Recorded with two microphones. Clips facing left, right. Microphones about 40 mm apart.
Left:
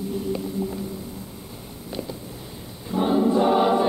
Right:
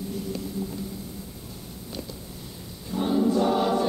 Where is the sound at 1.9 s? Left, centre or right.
Left.